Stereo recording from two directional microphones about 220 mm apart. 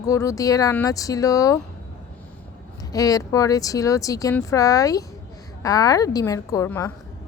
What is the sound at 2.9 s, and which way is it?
Speech, 15° left (ahead or behind).